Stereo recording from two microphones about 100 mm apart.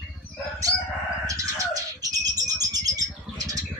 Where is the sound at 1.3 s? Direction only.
35° right (ahead or behind).